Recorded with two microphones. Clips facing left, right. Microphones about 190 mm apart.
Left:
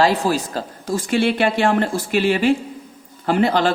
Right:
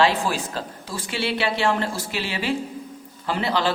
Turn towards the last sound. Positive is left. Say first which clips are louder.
# left 6 dB
turn(degrees=50)  # may be behind; listen again after turning